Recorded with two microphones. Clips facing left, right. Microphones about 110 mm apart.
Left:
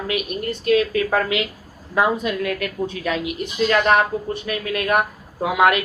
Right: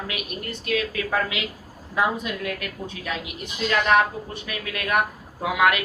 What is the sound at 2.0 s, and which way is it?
A woman's voice, 70° left (ahead or behind).